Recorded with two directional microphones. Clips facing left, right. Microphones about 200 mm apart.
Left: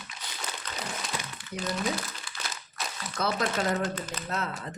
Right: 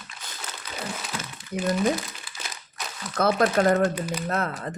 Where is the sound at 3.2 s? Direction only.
55° right (ahead or behind).